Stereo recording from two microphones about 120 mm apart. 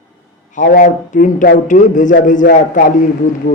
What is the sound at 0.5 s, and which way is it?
A man's voice, 90° left.